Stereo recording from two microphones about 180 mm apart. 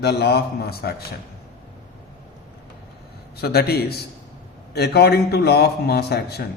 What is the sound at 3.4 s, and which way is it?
A man's voice, 60° left (ahead or behind).